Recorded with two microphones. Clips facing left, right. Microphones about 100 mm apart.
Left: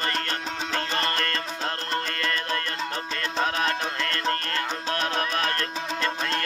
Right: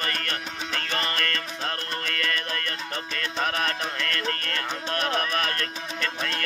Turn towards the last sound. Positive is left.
turn(degrees=30)  # may be behind; listen again after turning